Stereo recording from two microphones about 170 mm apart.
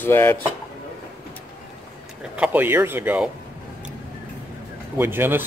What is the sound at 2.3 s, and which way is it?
Speech, 10° right (ahead or behind).